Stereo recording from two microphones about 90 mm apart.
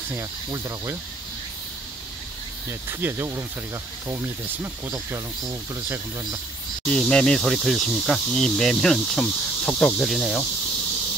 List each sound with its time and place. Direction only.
0.1 s speech: 35° right (ahead or behind)
2.9 s speech: 25° right (ahead or behind)
6.9 s insect: 10° left (ahead or behind)
10.1 s cricket: centre (ahead or behind)